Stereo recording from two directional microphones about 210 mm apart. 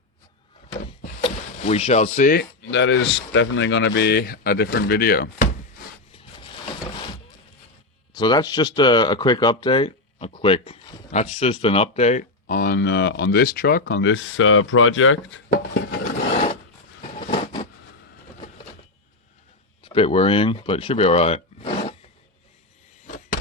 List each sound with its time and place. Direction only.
1.2 s speech: 30° left (ahead or behind); by 5.5 s 45° left (ahead or behind)
6.1 s a sound: 25° left (ahead or behind)
8.1 s speech: 20° left (ahead or behind); by 15.4 s 70° left (ahead or behind)
16.3 s roar: 30° left (ahead or behind)
17.0 s a sound: 25° left (ahead or behind)
18.3 s vehicle: 35° left (ahead or behind)
19.8 s speech: 25° left (ahead or behind)
23.0 s vehicle: 35° left (ahead or behind)